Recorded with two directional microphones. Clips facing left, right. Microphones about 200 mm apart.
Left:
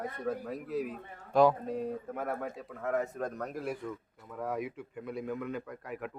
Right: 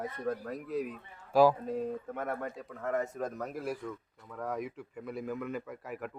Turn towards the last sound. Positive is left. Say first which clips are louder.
# even
turn(degrees=0)  # may be behind; listen again after turning